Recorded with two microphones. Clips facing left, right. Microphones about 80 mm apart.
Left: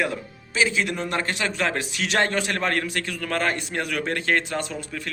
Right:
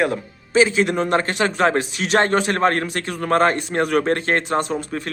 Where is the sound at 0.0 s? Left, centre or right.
Right.